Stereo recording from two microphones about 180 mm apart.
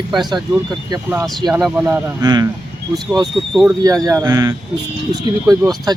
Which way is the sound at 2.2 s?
20° right (ahead or behind).